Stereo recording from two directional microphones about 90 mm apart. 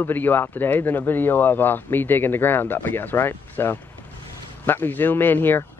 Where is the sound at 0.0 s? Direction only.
20° left (ahead or behind).